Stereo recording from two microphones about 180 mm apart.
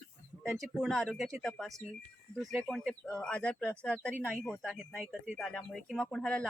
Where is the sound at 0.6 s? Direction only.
Centre (ahead or behind).